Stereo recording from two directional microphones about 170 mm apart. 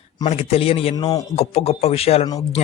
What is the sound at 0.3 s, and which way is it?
Speech, 35° left (ahead or behind).